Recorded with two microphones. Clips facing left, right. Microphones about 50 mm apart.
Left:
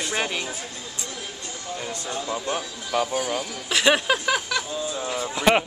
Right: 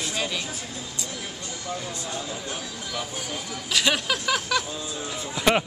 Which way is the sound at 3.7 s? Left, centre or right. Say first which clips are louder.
Left 4 dB; left.